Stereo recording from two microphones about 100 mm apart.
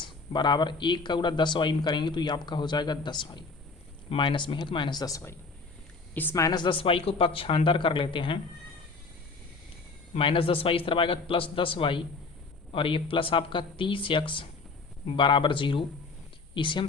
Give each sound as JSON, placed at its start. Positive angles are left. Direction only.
{"t": 0.0, "sound": "speech", "side_deg": 50}
{"t": 6.3, "sound": "speech", "side_deg": 40}
{"t": 10.2, "sound": "speech", "side_deg": 65}